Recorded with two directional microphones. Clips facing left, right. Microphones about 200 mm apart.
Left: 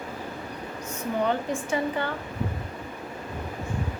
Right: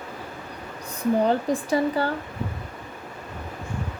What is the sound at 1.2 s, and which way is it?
Speech, 35° right (ahead or behind).